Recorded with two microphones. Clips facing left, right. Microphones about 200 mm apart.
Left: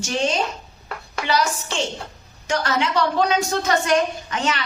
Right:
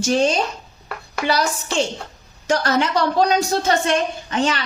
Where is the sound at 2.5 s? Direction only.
40° right (ahead or behind).